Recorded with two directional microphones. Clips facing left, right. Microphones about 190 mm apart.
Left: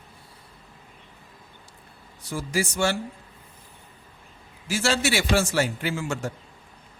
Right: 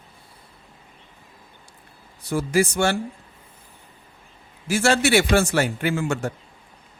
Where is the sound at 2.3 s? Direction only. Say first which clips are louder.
Right 7 dB; 60° right (ahead or behind).